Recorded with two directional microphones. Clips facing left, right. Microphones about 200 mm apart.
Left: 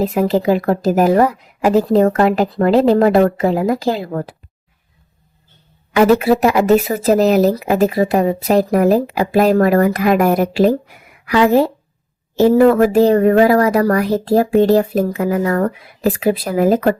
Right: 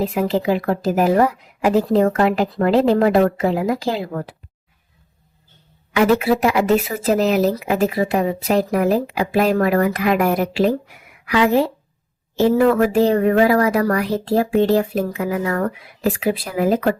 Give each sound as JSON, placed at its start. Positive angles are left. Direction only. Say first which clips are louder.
{"t": 0.0, "sound": "speech", "louder": "left 4 dB", "side_deg": 45}
{"t": 5.9, "sound": "speech", "louder": "left 4 dB", "side_deg": 40}